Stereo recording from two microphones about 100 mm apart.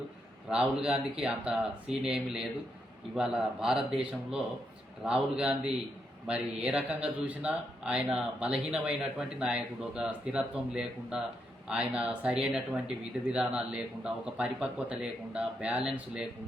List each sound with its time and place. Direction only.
0.5 s speech: 10° right (ahead or behind)